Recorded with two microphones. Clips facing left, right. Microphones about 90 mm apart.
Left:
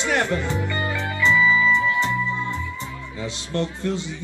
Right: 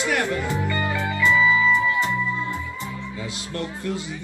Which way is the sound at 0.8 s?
15° right (ahead or behind).